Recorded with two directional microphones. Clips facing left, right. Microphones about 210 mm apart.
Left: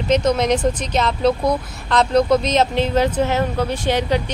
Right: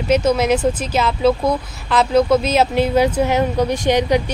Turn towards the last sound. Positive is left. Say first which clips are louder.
# right 3 dB
turn(degrees=-15)  # may be behind; listen again after turning